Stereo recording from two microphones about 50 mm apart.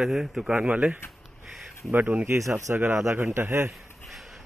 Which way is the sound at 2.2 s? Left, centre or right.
Right.